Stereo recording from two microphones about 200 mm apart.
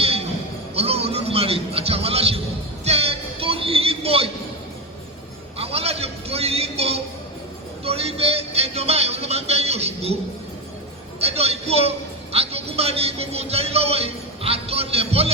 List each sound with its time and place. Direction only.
0.0 s music: 30° right (ahead or behind)
5.5 s music: 30° right (ahead or behind)
11.2 s a sound: 30° right (ahead or behind)